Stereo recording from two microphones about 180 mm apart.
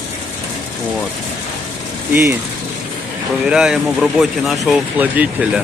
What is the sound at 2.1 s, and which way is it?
Speech, 15° right (ahead or behind).